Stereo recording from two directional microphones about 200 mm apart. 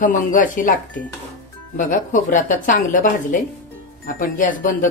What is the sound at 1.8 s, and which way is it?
Speech, 40° left (ahead or behind).